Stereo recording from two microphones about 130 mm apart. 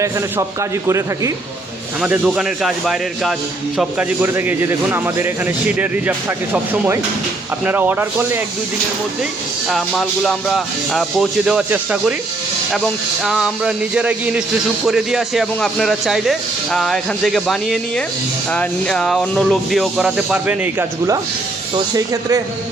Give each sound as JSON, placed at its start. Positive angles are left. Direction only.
{"t": 0.9, "sound": "speech", "side_deg": -25}
{"t": 2.0, "sound": "speech", "side_deg": -5}
{"t": 3.8, "sound": "a man's voice", "side_deg": -15}
{"t": 9.6, "sound": "speech", "side_deg": 0}
{"t": 13.2, "sound": "a man's voice", "side_deg": -5}
{"t": 21.9, "sound": "speech", "side_deg": -25}